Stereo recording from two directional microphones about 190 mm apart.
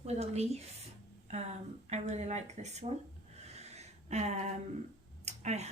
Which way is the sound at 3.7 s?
35° right (ahead or behind).